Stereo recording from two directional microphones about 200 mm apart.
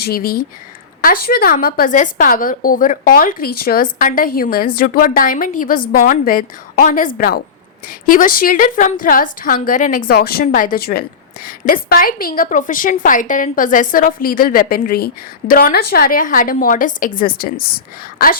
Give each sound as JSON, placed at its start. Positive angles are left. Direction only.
{"t": 0.0, "sound": "a woman's voice", "side_deg": 50}